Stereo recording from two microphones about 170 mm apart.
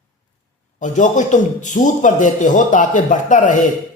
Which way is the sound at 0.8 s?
45° left (ahead or behind).